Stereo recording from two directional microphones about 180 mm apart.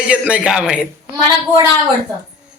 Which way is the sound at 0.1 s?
5° right (ahead or behind).